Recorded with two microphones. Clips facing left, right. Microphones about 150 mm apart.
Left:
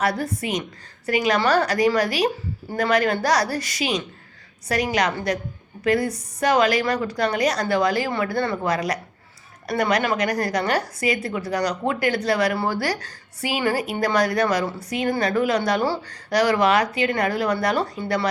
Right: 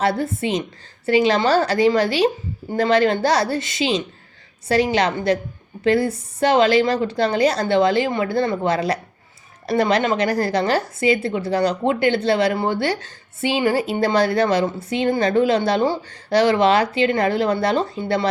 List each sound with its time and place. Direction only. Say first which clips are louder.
0.0 s a woman's voice: right 3 dB; 25° right (ahead or behind)